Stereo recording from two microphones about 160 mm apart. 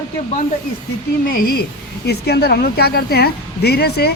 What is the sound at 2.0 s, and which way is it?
A woman's voice, 85° left.